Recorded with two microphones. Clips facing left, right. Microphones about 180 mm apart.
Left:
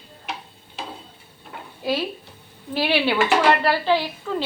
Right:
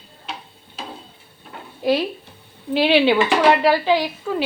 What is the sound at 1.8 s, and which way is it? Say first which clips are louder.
Speech: right 5 dB; 15° right (ahead or behind).